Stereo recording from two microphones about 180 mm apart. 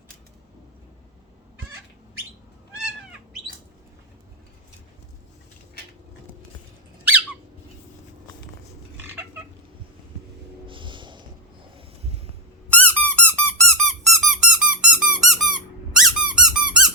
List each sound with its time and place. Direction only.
10.7 s snort: 25° right (ahead or behind)
12.0 s a sound: 35° right (ahead or behind)
12.7 s squeak: 10° left (ahead or behind)